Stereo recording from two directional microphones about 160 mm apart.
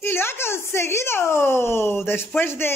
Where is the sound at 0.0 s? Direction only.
15° left (ahead or behind).